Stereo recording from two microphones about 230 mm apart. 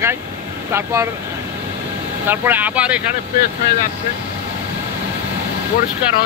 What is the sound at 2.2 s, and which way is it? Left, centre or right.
Speech, centre.